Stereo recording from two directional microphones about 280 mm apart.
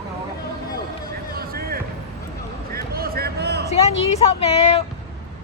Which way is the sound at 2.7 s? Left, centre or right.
Right.